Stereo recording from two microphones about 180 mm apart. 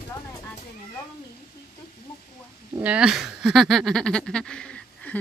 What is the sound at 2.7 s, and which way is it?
Speech, 5° right (ahead or behind).